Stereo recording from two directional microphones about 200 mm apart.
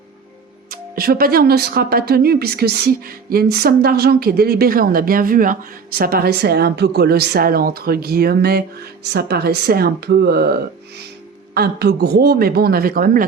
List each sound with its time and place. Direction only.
0.7 s speech: 50° right (ahead or behind)